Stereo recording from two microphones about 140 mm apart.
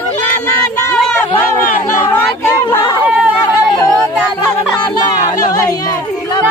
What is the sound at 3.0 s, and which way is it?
Chatter, 10° right (ahead or behind).